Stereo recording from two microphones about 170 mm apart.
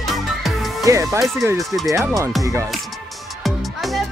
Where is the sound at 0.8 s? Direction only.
20° right (ahead or behind).